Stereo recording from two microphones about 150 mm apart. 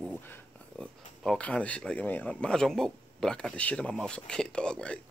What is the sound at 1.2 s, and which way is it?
Speech, 5° left (ahead or behind).